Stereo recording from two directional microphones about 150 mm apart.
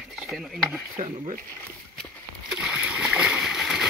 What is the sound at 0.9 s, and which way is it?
Speech, 45° right (ahead or behind).